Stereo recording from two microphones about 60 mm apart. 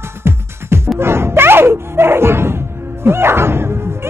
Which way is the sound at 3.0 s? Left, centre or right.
Right.